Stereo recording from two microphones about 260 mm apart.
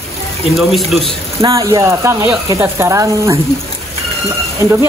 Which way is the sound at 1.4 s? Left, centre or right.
Centre.